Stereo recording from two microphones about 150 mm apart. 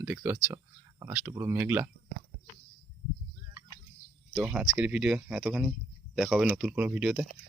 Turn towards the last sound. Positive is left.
turn(degrees=-5)  # may be behind; listen again after turning